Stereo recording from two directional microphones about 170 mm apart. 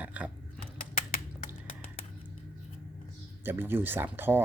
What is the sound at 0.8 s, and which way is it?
Typing, 55° left (ahead or behind).